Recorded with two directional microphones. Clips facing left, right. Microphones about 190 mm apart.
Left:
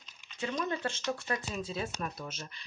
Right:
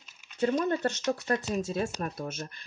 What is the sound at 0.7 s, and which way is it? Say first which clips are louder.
Speech: right 6 dB; 45° right (ahead or behind).